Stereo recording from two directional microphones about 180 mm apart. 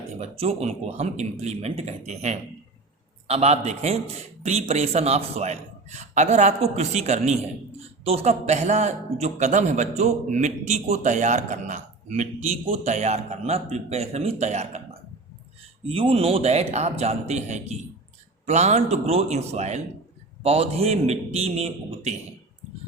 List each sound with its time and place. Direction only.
0.2 s speech: 35° right (ahead or behind)
15.9 s speech: 30° right (ahead or behind)